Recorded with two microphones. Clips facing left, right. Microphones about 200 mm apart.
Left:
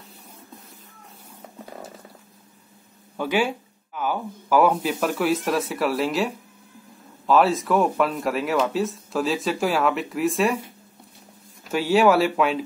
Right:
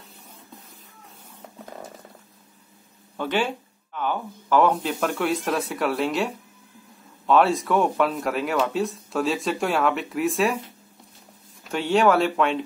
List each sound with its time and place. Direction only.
3.2 s speech: 10° left (ahead or behind)
11.7 s speech: 5° left (ahead or behind)